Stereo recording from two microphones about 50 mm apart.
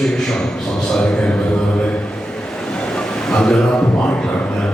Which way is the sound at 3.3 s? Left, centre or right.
Centre.